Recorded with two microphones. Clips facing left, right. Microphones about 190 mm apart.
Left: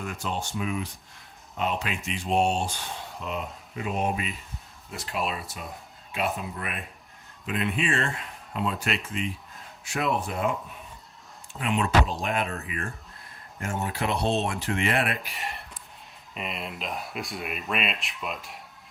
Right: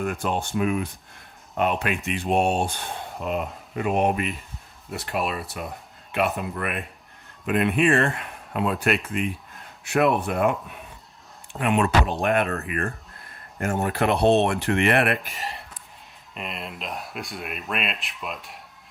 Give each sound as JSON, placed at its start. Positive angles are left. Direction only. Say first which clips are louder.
{"t": 0.0, "sound": "speech", "louder": "right 6 dB", "side_deg": -55}
{"t": 11.5, "sound": "speech", "louder": "right 3 dB", "side_deg": -60}
{"t": 15.3, "sound": "a sound", "louder": "right 2 dB", "side_deg": 0}
{"t": 16.3, "sound": "speech", "louder": "even", "side_deg": 0}